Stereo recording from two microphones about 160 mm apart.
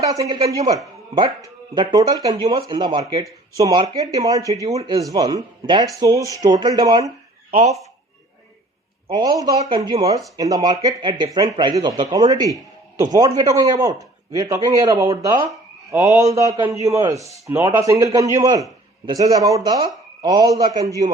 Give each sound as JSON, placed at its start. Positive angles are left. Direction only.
{"t": 0.0, "sound": "a man's voice", "side_deg": -20}
{"t": 7.5, "sound": "speech", "side_deg": -45}
{"t": 9.0, "sound": "a man's voice", "side_deg": -25}